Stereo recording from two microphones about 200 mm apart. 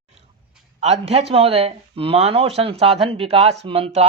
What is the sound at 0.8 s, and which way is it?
Speech, 30° right (ahead or behind).